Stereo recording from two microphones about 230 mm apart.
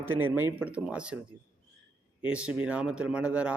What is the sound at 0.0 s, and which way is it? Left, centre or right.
A man's voice, centre.